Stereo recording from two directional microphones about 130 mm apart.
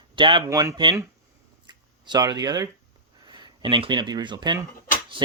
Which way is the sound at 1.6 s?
35° right (ahead or behind).